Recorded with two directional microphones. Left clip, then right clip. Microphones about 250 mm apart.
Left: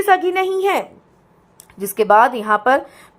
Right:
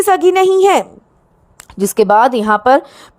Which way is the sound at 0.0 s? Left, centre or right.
Right.